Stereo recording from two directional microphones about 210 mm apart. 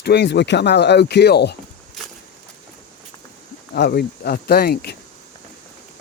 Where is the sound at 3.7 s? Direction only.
50° left (ahead or behind).